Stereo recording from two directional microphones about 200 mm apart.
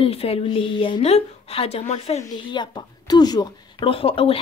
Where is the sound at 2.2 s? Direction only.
20° left (ahead or behind).